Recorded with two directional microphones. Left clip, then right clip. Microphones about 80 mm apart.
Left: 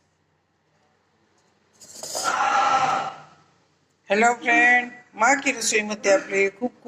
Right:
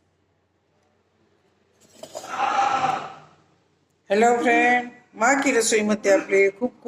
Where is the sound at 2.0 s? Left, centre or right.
Right.